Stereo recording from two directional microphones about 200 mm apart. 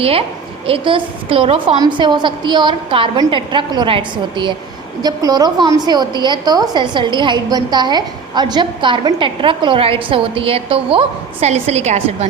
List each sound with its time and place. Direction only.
0.0 s a woman's voice: 30° right (ahead or behind)